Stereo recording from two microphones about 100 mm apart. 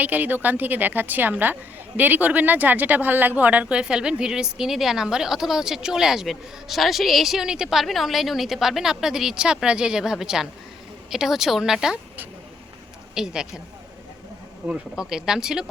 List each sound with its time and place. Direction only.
0.0 s a woman's voice: 15° right (ahead or behind)
13.1 s a woman's voice: 5° right (ahead or behind)
14.7 s a woman's voice: 5° right (ahead or behind)